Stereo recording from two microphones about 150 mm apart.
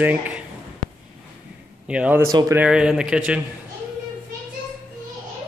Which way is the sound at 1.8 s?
10° right (ahead or behind).